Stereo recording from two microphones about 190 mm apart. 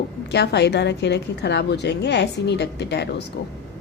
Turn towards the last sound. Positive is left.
turn(degrees=65)  # may be behind; listen again after turning